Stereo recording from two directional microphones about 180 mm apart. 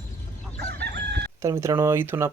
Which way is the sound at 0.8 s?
65° right (ahead or behind).